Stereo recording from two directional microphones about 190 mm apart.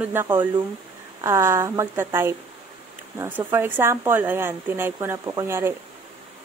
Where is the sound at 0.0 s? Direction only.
10° right (ahead or behind).